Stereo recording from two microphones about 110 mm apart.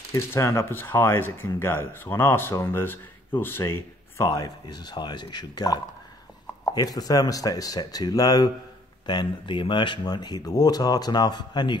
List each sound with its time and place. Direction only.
0.1 s speech: 25° left (ahead or behind)
9.0 s speech: 45° left (ahead or behind)